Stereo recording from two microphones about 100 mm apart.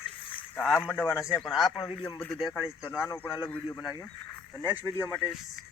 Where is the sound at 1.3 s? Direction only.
Centre (ahead or behind).